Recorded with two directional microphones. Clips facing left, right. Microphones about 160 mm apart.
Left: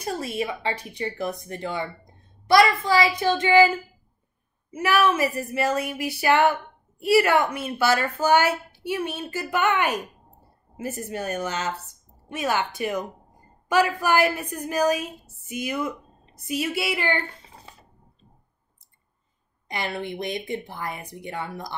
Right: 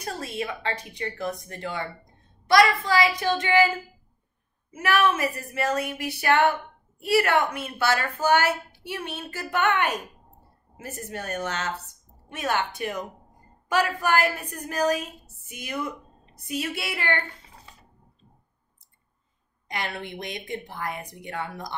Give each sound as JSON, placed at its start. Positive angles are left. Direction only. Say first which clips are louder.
{"t": 0.2, "sound": "speech", "louder": "left 3 dB", "side_deg": 20}
{"t": 2.5, "sound": "a woman's voice", "louder": "left 1 dB", "side_deg": 25}
{"t": 4.8, "sound": "speech", "louder": "left 2 dB", "side_deg": 5}
{"t": 19.7, "sound": "speech", "louder": "left 3 dB", "side_deg": 5}